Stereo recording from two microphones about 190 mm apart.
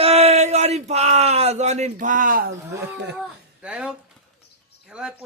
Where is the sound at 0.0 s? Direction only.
35° right (ahead or behind).